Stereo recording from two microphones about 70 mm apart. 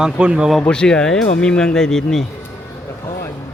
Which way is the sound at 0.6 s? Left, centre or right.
Centre.